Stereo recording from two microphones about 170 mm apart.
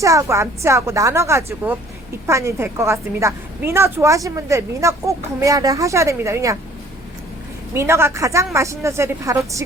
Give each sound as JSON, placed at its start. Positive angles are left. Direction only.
{"t": 0.0, "sound": "a woman's voice", "side_deg": -20}
{"t": 7.7, "sound": "a woman's voice", "side_deg": -15}